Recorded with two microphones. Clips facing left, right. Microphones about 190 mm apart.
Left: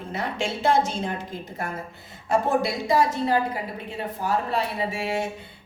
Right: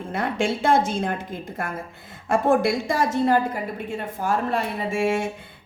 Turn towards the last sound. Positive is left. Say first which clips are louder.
# right 4 dB
turn(degrees=-50)  # may be behind; listen again after turning